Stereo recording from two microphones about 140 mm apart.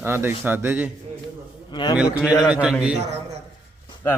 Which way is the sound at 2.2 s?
5° right (ahead or behind).